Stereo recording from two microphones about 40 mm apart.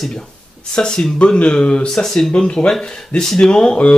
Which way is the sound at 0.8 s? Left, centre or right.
Centre.